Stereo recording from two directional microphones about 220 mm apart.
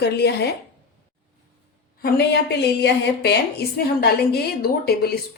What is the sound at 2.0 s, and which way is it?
A woman's voice, 45° left (ahead or behind).